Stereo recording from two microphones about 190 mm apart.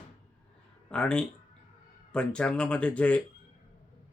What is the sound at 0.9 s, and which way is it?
Speech, 5° left (ahead or behind).